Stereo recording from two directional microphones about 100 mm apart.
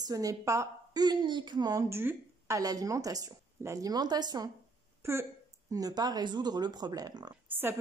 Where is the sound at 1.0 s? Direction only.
50° right (ahead or behind).